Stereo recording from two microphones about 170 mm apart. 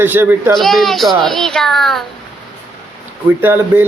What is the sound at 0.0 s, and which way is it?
Speech, 10° right (ahead or behind).